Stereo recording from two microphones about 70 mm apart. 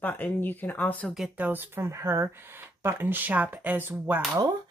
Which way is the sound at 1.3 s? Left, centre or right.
Right.